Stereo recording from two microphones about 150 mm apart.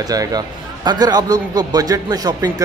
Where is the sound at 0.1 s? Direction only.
25° right (ahead or behind).